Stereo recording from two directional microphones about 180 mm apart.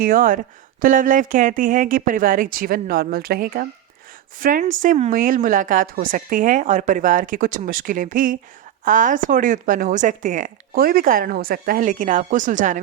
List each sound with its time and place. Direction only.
0.0 s speech: 50° right (ahead or behind)